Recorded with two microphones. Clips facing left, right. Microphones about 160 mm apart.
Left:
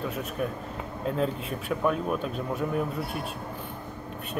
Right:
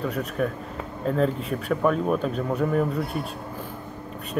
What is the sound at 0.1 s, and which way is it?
Speech, centre (ahead or behind).